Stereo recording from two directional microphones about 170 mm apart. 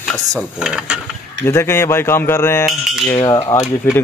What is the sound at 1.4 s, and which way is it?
A man's voice, 15° left (ahead or behind).